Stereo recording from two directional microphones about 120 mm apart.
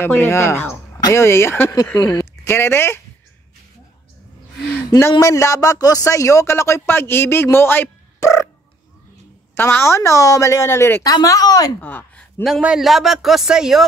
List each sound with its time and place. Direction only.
0.0 s speech: 20° left (ahead or behind)
5.2 s speech: 25° left (ahead or behind)
9.6 s speech: 20° left (ahead or behind)
11.1 s speech: 30° left (ahead or behind)
11.8 s a sound: 15° left (ahead or behind)
12.4 s a man's voice: 5° right (ahead or behind)